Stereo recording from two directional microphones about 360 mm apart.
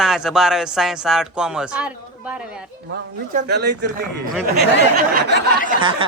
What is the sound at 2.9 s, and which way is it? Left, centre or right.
Speech, right.